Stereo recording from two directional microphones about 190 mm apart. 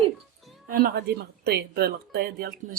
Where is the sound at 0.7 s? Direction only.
50° right (ahead or behind).